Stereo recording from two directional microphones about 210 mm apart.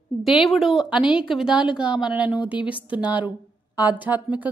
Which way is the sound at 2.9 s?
5° right (ahead or behind).